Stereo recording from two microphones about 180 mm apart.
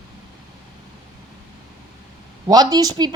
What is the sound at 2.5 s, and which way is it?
Speech, 20° right (ahead or behind).